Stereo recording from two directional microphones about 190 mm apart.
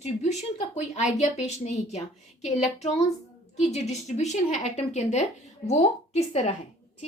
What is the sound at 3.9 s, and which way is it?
Speech, 35° left (ahead or behind).